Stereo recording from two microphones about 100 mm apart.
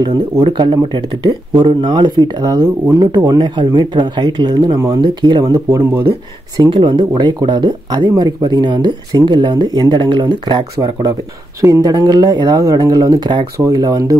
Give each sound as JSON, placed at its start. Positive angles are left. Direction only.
{"t": 0.5, "sound": "speech", "side_deg": -50}
{"t": 4.7, "sound": "speech", "side_deg": -30}
{"t": 5.0, "sound": "speech", "side_deg": -50}
{"t": 5.4, "sound": "speech", "side_deg": -35}
{"t": 6.6, "sound": "speech", "side_deg": -50}
{"t": 11.6, "sound": "speech", "side_deg": -35}
{"t": 11.9, "sound": "speech", "side_deg": -45}